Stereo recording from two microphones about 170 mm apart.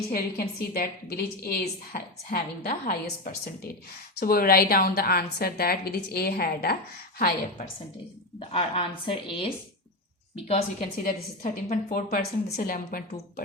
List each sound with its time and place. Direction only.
0.1 s a woman's voice: 60° left (ahead or behind)
8.4 s a woman's voice: 35° left (ahead or behind)
10.3 s a woman's voice: 40° left (ahead or behind)